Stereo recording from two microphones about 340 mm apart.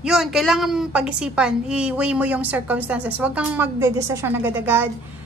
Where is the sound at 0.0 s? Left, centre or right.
Centre.